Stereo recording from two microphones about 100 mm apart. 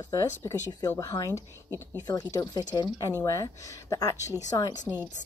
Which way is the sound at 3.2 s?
35° left (ahead or behind).